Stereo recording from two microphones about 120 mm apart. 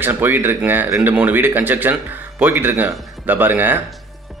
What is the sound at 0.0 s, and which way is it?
Speech, 15° right (ahead or behind).